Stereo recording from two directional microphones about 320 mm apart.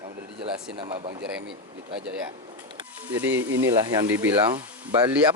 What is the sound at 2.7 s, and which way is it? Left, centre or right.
Speech, centre.